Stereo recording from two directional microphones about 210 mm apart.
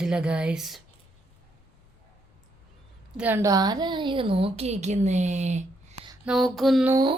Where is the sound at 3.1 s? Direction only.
10° right (ahead or behind); by 6.1 s 35° right (ahead or behind).